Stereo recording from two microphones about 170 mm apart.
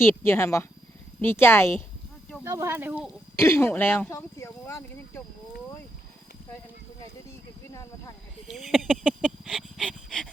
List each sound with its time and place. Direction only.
0.0 s speech: 15° left (ahead or behind)
2.4 s speech: 15° right (ahead or behind)
3.3 s speech: 15° left (ahead or behind)
7.3 s snake: 20° left (ahead or behind)
8.4 s a sound: centre (ahead or behind)